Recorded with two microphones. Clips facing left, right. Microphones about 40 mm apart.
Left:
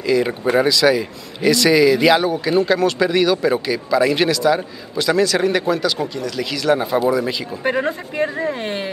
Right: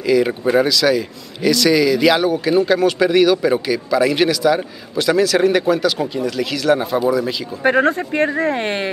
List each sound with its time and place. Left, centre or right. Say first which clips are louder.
0.0 s a man's voice: right 2 dB; centre
2.4 s a man's voice: right 2 dB; centre
7.6 s speech: right 6 dB; right